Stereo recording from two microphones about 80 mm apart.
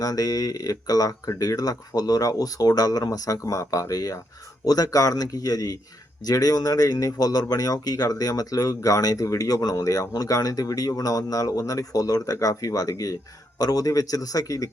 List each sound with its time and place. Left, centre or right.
0.0 s speech: left